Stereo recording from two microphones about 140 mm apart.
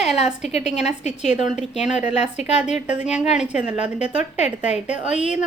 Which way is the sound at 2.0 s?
55° left (ahead or behind).